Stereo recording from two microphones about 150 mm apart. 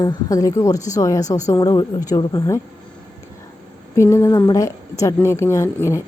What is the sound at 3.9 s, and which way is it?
A woman's voice, 20° left (ahead or behind).